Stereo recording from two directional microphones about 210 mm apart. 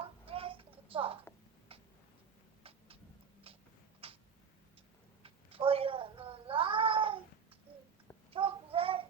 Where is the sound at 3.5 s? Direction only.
25° right (ahead or behind).